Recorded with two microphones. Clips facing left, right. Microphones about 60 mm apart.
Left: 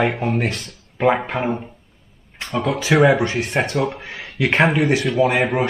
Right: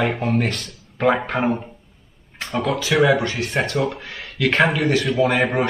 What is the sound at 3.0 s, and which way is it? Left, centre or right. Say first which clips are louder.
Speech: left 1 dB; left.